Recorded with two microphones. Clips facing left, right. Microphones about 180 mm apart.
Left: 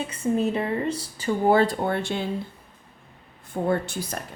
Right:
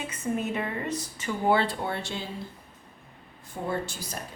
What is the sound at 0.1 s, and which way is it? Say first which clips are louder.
Speech: left 6 dB; 30° left (ahead or behind).